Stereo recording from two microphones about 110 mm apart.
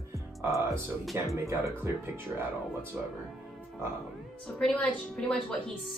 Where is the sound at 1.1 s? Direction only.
25° right (ahead or behind).